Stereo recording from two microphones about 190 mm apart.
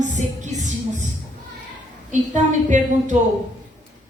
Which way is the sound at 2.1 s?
40° right (ahead or behind).